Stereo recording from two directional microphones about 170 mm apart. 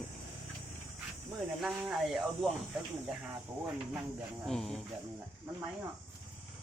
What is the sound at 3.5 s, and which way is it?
Speech, 15° right (ahead or behind).